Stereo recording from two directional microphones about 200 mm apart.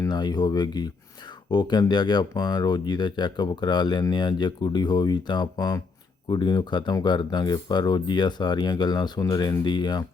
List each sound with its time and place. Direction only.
0.0 s speech: 20° left (ahead or behind)